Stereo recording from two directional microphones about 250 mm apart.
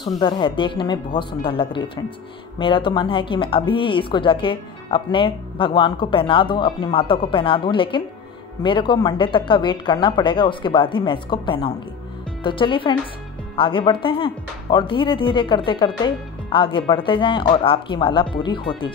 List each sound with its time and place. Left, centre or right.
0.0 s a woman's voice: centre